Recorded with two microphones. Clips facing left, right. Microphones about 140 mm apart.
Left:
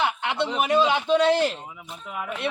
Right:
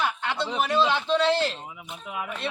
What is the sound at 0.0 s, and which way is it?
Speech, 20° left (ahead or behind).